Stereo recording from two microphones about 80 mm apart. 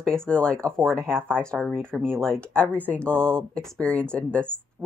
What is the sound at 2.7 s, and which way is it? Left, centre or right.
Speech, centre.